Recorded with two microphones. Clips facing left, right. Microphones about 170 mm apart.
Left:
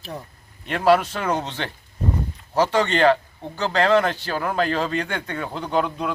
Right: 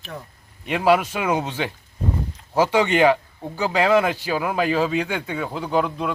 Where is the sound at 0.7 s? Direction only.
10° right (ahead or behind).